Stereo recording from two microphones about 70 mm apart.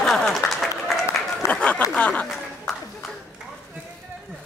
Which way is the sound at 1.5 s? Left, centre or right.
Centre.